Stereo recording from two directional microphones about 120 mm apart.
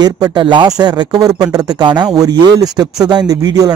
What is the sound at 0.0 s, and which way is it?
A man's voice, 40° right (ahead or behind).